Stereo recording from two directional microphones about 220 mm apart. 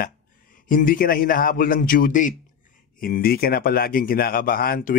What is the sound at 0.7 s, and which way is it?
Speech, 40° left (ahead or behind).